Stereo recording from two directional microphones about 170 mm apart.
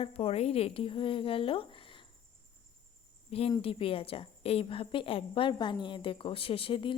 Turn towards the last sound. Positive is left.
turn(degrees=30)  # may be behind; listen again after turning